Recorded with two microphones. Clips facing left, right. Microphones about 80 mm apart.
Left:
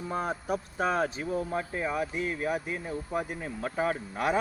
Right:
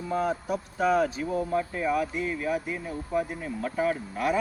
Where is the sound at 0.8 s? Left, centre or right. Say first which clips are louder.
Right 6 dB; left.